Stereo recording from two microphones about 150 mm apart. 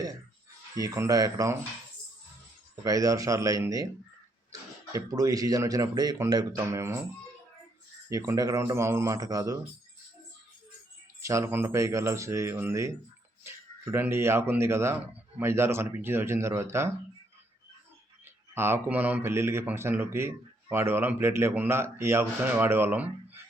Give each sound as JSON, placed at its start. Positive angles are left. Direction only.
{"t": 0.8, "sound": "speech", "side_deg": -25}
{"t": 2.8, "sound": "speech", "side_deg": -20}
{"t": 4.9, "sound": "speech", "side_deg": -25}
{"t": 8.1, "sound": "speech", "side_deg": -20}
{"t": 11.2, "sound": "a man's voice", "side_deg": -20}
{"t": 18.5, "sound": "a man's voice", "side_deg": -15}